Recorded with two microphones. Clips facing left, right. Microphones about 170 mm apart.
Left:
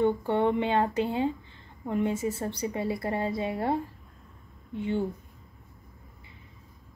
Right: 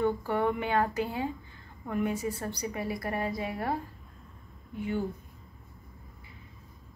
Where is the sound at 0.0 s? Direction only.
25° left (ahead or behind).